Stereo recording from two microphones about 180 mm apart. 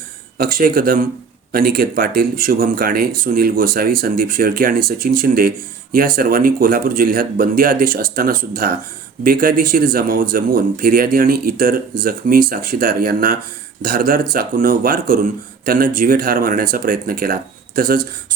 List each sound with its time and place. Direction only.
0.3 s speech: 55° right (ahead or behind)